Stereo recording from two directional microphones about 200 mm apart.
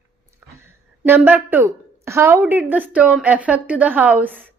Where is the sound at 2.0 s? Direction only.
15° right (ahead or behind).